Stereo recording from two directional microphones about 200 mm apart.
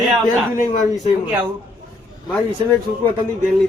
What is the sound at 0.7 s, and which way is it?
Speech, 40° left (ahead or behind).